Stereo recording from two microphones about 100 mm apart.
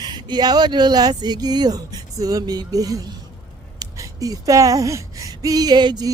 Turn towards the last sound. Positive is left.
turn(degrees=-45)  # may be behind; listen again after turning